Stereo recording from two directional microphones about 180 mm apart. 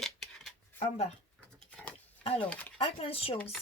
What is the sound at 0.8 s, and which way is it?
Speech, 35° left (ahead or behind).